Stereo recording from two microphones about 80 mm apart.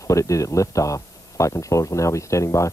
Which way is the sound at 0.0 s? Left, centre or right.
Left.